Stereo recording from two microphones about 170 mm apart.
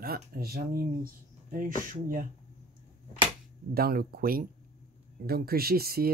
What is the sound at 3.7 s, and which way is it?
Speech, 65° right (ahead or behind).